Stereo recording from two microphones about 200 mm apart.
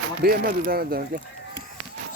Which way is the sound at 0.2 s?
50° right (ahead or behind).